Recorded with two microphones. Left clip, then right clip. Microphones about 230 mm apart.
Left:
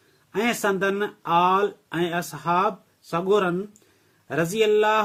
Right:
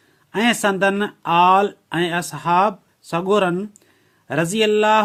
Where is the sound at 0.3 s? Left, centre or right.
Right.